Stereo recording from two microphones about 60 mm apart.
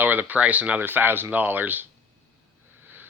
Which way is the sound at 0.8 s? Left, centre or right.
Right.